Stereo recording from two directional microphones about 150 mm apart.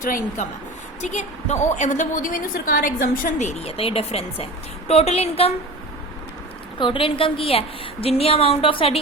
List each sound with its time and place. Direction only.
0.0 s a woman's voice: 65° left (ahead or behind)
1.0 s a woman's voice: 50° left (ahead or behind)
6.7 s speech: 35° left (ahead or behind)